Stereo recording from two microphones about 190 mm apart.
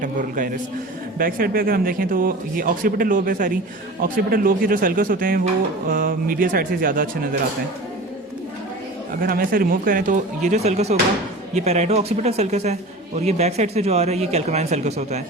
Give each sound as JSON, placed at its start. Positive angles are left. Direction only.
{"t": 0.0, "sound": "a man's voice", "side_deg": -45}
{"t": 9.2, "sound": "a man's voice", "side_deg": -50}